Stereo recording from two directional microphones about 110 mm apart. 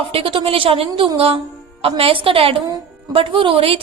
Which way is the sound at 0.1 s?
50° right (ahead or behind).